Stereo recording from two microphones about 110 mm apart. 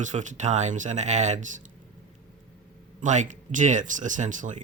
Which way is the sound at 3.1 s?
90° right.